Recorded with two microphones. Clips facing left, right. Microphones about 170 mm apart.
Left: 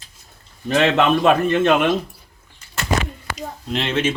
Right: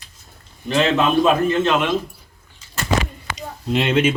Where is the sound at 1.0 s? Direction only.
65° left (ahead or behind).